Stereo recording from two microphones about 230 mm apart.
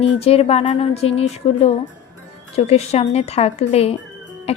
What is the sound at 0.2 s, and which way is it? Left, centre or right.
A woman's voice, left.